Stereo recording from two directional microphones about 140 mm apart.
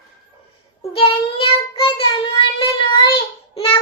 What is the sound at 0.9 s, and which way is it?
Child singing, 40° left (ahead or behind).